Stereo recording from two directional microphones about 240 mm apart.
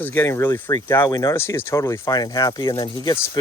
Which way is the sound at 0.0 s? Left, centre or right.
Centre.